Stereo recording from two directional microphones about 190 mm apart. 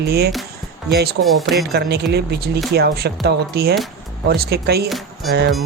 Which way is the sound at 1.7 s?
60° right (ahead or behind).